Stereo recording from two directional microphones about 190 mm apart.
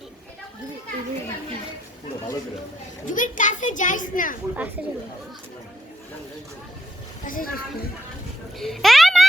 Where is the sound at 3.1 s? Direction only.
45° left (ahead or behind).